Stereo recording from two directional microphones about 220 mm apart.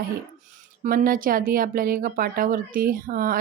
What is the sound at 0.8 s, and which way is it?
A woman's voice, 40° right (ahead or behind).